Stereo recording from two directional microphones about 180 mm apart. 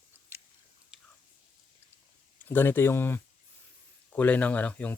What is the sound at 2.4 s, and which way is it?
Speech, 10° left (ahead or behind).